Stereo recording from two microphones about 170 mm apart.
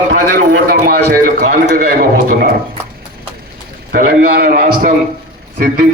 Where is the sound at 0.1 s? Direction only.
75° right (ahead or behind); by 2.5 s 55° right (ahead or behind).